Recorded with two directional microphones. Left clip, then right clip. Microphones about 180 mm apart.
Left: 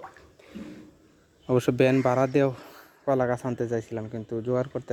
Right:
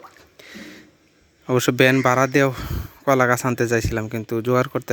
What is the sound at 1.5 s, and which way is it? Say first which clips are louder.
Speech: right 5 dB; 5° right (ahead or behind).